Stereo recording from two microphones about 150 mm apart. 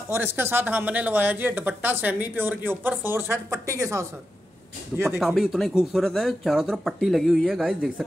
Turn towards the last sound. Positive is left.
turn(degrees=0)  # may be behind; listen again after turning